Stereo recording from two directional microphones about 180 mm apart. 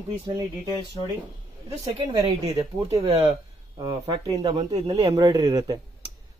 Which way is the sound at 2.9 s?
30° right (ahead or behind).